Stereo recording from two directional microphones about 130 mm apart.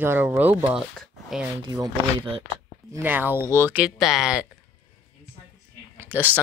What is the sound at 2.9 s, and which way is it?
Speech, 15° right (ahead or behind).